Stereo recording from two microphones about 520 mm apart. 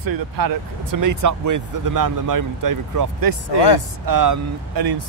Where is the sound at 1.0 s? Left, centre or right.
Right.